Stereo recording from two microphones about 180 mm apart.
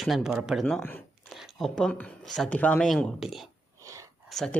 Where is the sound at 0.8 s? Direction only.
10° left (ahead or behind).